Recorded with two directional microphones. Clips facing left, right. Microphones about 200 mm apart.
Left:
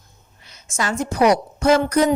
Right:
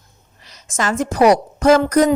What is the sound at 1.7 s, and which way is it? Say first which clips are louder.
Speech: right 3 dB; 45° right (ahead or behind).